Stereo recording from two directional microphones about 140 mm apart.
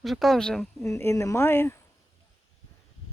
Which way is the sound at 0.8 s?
20° left (ahead or behind).